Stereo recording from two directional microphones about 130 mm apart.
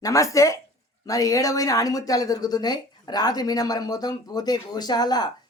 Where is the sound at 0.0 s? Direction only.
25° left (ahead or behind).